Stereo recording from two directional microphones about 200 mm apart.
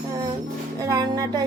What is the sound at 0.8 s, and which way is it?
Music, 20° right (ahead or behind).